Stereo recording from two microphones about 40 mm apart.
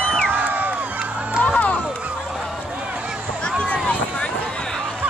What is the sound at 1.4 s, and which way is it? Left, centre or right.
Run, left.